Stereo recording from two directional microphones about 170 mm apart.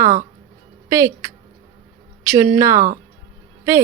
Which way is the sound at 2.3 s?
15° right (ahead or behind).